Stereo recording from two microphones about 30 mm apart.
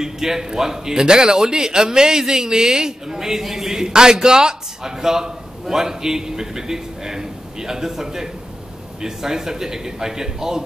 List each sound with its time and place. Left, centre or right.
0.0 s a man's voice: centre